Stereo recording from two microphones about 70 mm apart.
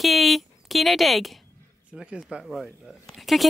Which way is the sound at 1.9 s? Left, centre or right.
Centre.